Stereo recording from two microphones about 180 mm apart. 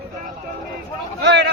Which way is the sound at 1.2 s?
70° right (ahead or behind).